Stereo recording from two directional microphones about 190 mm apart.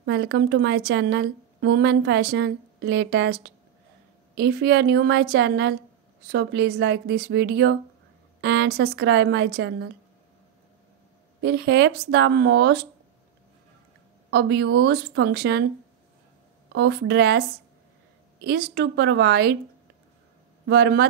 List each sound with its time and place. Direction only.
0.0 s a woman's voice: 65° right (ahead or behind)
11.4 s a woman's voice: 60° right (ahead or behind)
14.3 s a woman's voice: 60° right (ahead or behind)
16.7 s a woman's voice: 60° right (ahead or behind)
20.6 s a woman's voice: 60° right (ahead or behind)